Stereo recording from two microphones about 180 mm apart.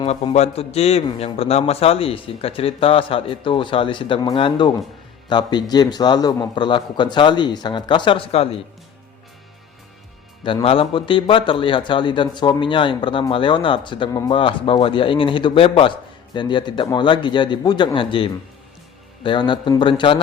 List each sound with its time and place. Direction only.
0.0 s a man's voice: 35° left (ahead or behind)
10.4 s a man's voice: 30° left (ahead or behind)